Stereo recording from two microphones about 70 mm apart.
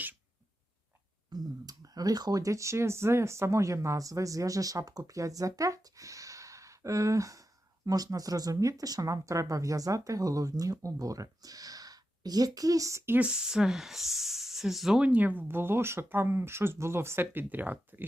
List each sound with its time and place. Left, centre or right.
1.3 s speech: right
13.1 s speech: centre
15.0 s speech: right